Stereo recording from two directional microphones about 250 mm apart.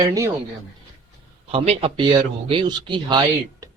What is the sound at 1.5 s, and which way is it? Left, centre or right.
Speech, right.